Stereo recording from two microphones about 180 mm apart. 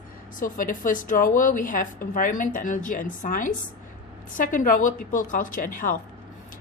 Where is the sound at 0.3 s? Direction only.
45° left (ahead or behind).